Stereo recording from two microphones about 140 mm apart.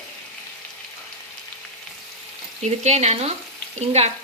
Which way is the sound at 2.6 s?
55° right (ahead or behind).